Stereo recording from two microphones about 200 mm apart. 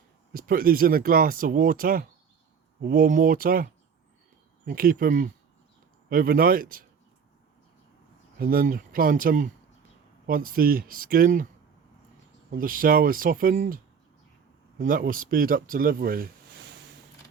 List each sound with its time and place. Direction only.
0.3 s speech: 45° right (ahead or behind)
8.4 s speech: 45° right (ahead or behind)
12.5 s speech: 45° right (ahead or behind)
14.8 s speech: 45° right (ahead or behind)